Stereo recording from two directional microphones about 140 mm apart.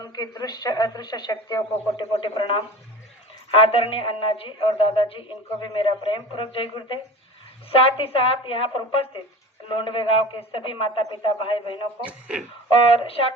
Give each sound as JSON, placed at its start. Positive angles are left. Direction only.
{"t": 0.1, "sound": "a woman's voice", "side_deg": 30}
{"t": 12.0, "sound": "speech", "side_deg": -10}
{"t": 12.6, "sound": "speech", "side_deg": 45}